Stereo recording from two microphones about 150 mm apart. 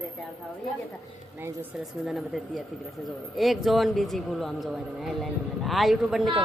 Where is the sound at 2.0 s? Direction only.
Centre (ahead or behind).